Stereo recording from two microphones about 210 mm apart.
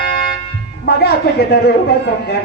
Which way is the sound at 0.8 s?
50° left (ahead or behind).